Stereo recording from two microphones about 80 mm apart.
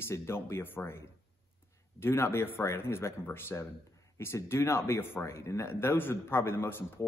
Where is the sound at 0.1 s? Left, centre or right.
Left.